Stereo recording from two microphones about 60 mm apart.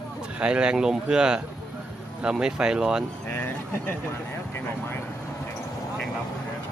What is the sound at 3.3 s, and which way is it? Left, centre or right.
Speech, left.